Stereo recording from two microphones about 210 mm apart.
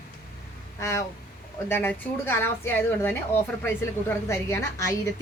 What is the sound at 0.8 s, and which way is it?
Speech, 15° left (ahead or behind).